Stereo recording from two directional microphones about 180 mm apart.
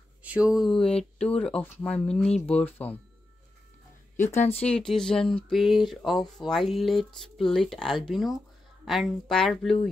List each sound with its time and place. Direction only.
0.2 s speech: 5° right (ahead or behind); by 2.9 s 10° left (ahead or behind)
4.4 s speech: 35° left (ahead or behind)
4.6 s speech: 5° left (ahead or behind)